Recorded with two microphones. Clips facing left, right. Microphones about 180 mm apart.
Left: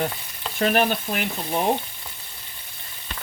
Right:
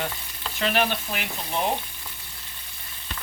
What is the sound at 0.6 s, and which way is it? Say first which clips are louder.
Speech: left 4 dB; 45° left (ahead or behind).